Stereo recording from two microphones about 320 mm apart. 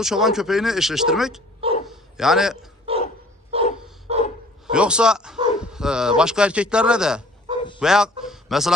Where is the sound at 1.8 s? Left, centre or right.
Centre.